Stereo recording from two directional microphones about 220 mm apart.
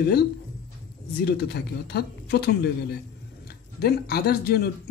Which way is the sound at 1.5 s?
45° left (ahead or behind).